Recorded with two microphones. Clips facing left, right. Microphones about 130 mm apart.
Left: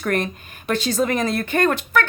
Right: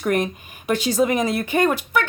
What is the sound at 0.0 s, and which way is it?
A woman's voice, 15° right (ahead or behind).